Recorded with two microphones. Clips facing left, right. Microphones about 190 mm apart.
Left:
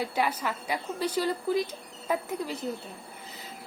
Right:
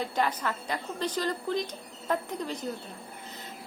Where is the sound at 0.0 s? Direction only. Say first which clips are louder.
Even; 10° left (ahead or behind).